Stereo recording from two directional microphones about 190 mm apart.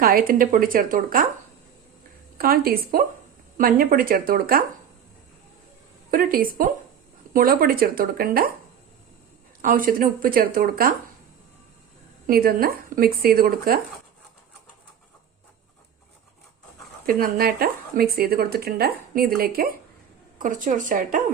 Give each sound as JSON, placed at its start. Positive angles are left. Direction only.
{"t": 0.0, "sound": "speech", "side_deg": -50}
{"t": 2.4, "sound": "speech", "side_deg": -50}
{"t": 6.1, "sound": "speech", "side_deg": -50}
{"t": 9.6, "sound": "speech", "side_deg": -45}
{"t": 12.2, "sound": "speech", "side_deg": -50}
{"t": 17.1, "sound": "speech", "side_deg": -50}